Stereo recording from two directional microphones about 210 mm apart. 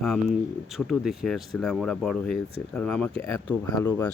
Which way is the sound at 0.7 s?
Centre (ahead or behind).